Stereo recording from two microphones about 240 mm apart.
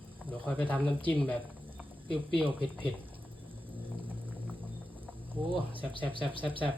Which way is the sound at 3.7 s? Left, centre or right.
Centre.